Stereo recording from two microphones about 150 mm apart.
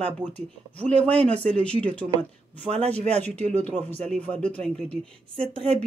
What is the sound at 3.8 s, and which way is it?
Speech, 10° left (ahead or behind).